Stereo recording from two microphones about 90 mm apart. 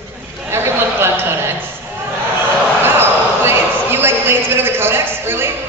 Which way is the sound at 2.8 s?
25° right (ahead or behind).